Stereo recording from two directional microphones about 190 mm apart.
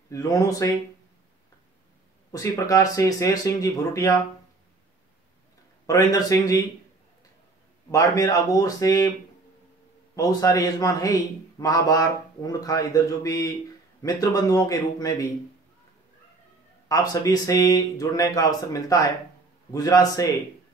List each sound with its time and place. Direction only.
0.1 s a man's voice: 20° left (ahead or behind)
2.3 s a man's voice: 20° left (ahead or behind)
5.9 s a man's voice: 20° left (ahead or behind)
7.9 s a man's voice: 15° left (ahead or behind)
10.1 s a man's voice: 20° left (ahead or behind)
16.9 s a man's voice: 20° left (ahead or behind)